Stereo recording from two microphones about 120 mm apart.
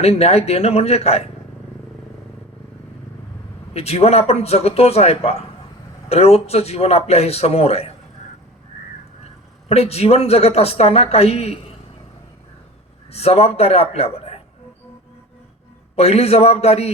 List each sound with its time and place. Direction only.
0.0 s a man's voice: 60° left (ahead or behind)
3.8 s a man's voice: 60° left (ahead or behind)
9.2 s a woman's voice: 55° left (ahead or behind)
13.1 s a man's voice: 60° left (ahead or behind)
16.0 s a man's voice: 55° left (ahead or behind)